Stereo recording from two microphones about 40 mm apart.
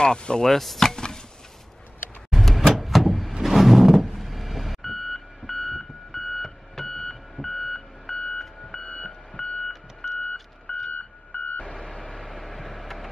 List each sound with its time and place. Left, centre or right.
0.0 s chopping: left
0.5 s a sound: centre
2.3 s door: centre
3.4 s reversing beeps: centre
7.3 s alarm clock: centre
8.8 s alarm clock: left
9.3 s a sound: left
10.0 s vehicle: left
10.9 s car alarm: left
11.7 s a sound: centre